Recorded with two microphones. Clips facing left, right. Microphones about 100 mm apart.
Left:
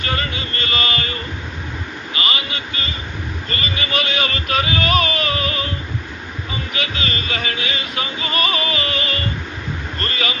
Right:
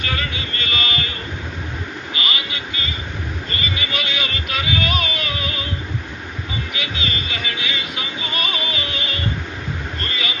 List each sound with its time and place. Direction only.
0.0 s a sound: 40° left (ahead or behind)
2.1 s vehicle: 35° left (ahead or behind)
3.5 s speech: 45° left (ahead or behind)
6.7 s music: 50° left (ahead or behind)
10.0 s speech: 55° left (ahead or behind)